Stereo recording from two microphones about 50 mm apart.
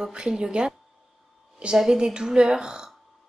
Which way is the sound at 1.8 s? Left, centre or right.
Centre.